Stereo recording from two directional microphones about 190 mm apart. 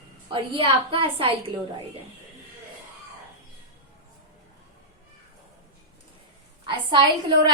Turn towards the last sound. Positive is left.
turn(degrees=-25)  # may be behind; listen again after turning